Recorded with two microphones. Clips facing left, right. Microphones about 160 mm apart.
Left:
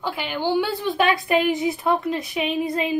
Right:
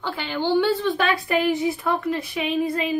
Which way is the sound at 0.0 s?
10° left (ahead or behind).